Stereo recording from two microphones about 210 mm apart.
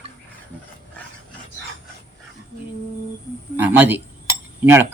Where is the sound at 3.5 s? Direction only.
10° right (ahead or behind).